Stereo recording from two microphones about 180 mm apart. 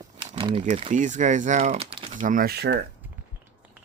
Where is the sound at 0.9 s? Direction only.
45° right (ahead or behind).